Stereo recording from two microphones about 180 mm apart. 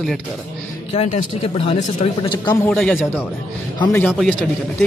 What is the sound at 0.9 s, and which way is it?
Speech, 35° left (ahead or behind).